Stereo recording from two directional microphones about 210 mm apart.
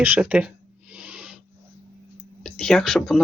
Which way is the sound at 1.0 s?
5° right (ahead or behind).